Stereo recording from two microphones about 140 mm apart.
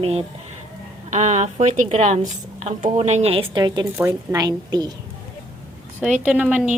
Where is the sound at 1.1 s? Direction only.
55° right (ahead or behind).